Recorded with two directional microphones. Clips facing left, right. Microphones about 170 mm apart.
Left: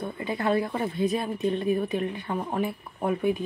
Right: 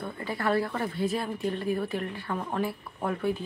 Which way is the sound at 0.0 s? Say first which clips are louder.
Left 3 dB; 20° left (ahead or behind).